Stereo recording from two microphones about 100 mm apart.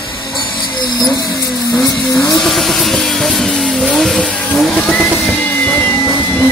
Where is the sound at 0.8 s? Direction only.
45° left (ahead or behind).